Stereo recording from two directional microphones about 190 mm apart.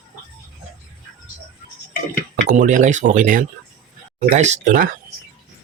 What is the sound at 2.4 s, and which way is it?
Speech, 45° right (ahead or behind).